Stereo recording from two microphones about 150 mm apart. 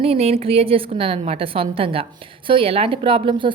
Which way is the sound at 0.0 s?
40° right (ahead or behind).